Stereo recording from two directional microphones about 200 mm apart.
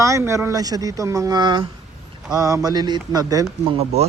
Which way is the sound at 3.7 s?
30° right (ahead or behind).